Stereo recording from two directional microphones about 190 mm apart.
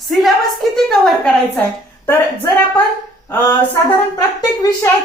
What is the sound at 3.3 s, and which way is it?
Speech, 15° left (ahead or behind).